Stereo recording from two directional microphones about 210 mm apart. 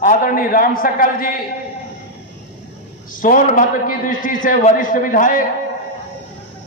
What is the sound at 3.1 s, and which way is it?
A man's voice, 40° left (ahead or behind).